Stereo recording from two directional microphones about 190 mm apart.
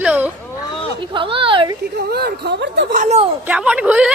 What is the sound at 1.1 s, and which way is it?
Speech, 30° right (ahead or behind).